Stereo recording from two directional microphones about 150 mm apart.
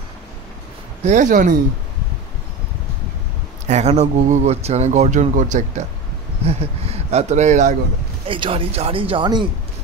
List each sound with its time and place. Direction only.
1.0 s speech: 55° right (ahead or behind)
3.6 s speech: 50° right (ahead or behind)
6.4 s speech: 45° right (ahead or behind)
8.3 s speech: 35° right (ahead or behind)